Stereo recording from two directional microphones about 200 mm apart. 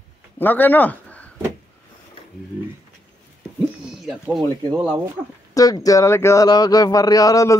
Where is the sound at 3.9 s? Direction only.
Centre (ahead or behind).